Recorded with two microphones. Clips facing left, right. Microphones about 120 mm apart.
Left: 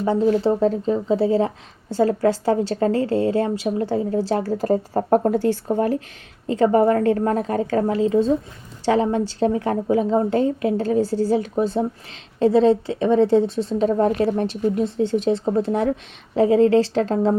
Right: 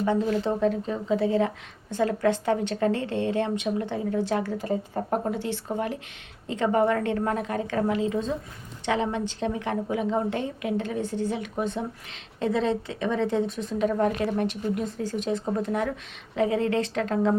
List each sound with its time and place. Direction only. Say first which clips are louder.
0.0 s speech: left 6 dB; 30° left (ahead or behind)